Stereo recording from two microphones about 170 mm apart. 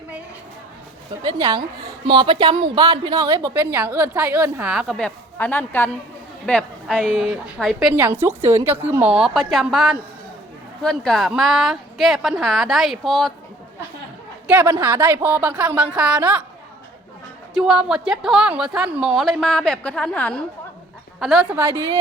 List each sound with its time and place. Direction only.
1.2 s a woman's voice: 25° right (ahead or behind); by 13.3 s centre (ahead or behind)
14.4 s a woman's voice: 10° right (ahead or behind)
17.5 s a woman's voice: centre (ahead or behind)